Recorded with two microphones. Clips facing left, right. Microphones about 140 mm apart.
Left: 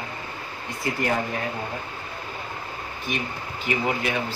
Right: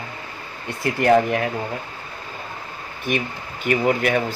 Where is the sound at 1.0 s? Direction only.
75° right (ahead or behind).